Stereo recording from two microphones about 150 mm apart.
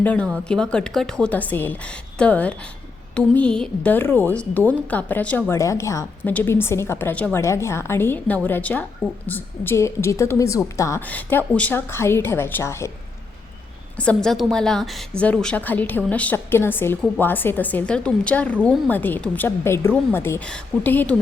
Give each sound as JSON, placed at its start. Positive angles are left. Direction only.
{"t": 0.0, "sound": "a woman's voice", "side_deg": 10}
{"t": 13.9, "sound": "a woman's voice", "side_deg": 10}